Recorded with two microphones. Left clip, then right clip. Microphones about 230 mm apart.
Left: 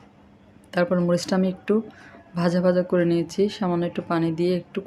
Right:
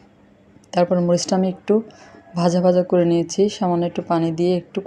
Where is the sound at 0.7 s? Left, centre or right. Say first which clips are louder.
Right 4 dB; centre.